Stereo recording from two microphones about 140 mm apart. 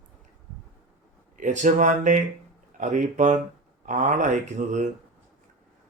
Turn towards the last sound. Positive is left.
turn(degrees=-60)  # may be behind; listen again after turning